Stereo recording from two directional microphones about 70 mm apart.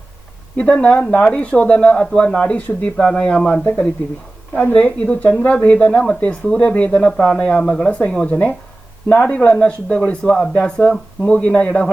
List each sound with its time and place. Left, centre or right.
0.5 s speech: centre
2.6 s speech: left
3.0 s speech: centre
9.3 s speech: centre